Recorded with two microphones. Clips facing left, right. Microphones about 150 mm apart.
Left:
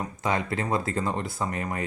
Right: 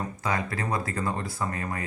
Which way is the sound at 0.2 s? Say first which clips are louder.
Left 3 dB; 25° left (ahead or behind).